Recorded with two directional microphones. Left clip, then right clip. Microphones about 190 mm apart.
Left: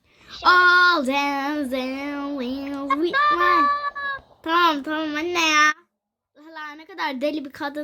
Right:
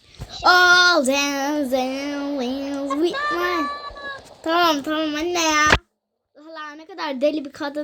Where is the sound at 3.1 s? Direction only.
40° left (ahead or behind).